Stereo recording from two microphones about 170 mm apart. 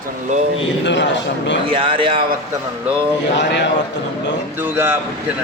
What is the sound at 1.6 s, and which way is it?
Speech, 30° right (ahead or behind).